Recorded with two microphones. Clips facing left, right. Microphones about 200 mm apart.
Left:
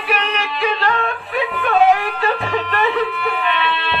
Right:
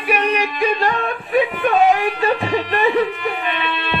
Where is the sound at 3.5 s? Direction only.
45° right (ahead or behind).